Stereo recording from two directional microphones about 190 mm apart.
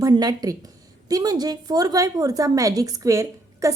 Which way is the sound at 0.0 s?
20° right (ahead or behind).